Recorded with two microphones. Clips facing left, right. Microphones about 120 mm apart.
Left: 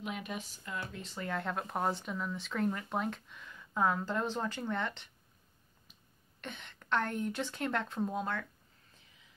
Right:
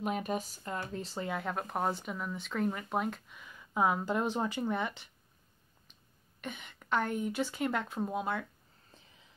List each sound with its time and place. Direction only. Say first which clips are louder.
0.0 s speech: right 6 dB; 40° right (ahead or behind)
1.2 s speech: left 1 dB; 5° right (ahead or behind)
6.4 s speech: right 3 dB; 5° right (ahead or behind)